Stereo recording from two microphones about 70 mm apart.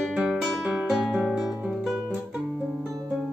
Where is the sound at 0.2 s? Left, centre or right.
Centre.